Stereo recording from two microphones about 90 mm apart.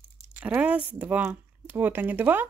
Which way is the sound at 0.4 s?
15° right (ahead or behind).